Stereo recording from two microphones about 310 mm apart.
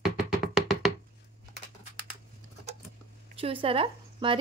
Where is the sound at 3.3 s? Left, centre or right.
Centre.